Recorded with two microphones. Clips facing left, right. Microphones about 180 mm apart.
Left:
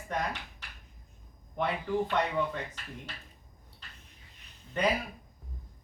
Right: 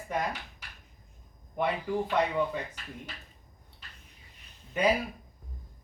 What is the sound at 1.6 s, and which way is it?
Speech, 10° right (ahead or behind).